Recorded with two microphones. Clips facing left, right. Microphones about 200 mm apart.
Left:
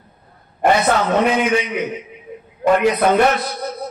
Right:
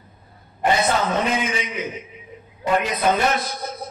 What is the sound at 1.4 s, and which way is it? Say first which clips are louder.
A man's voice: left 7 dB; 65° left (ahead or behind).